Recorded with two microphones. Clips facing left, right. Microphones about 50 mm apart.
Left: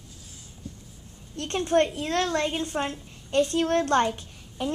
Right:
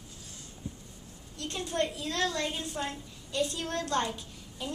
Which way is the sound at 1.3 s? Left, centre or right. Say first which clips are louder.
Left 9 dB; left.